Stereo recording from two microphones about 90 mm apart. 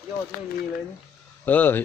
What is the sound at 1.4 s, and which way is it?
Speech, 20° left (ahead or behind).